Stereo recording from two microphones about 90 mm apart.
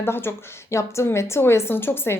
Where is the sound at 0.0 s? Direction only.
25° left (ahead or behind).